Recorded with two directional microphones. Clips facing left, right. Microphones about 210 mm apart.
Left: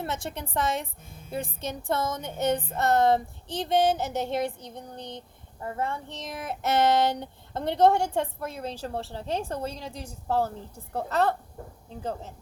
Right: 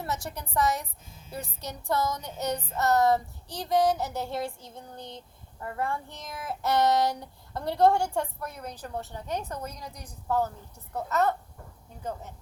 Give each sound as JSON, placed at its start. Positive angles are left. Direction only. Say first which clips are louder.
{"t": 0.0, "sound": "a woman's voice", "louder": "left 2 dB", "side_deg": 25}
{"t": 0.5, "sound": "child singing", "louder": "right 2 dB", "side_deg": 25}
{"t": 10.9, "sound": "a woman's voice", "louder": "left 1 dB", "side_deg": 30}
{"t": 11.9, "sound": "child singing", "louder": "left 3 dB", "side_deg": 30}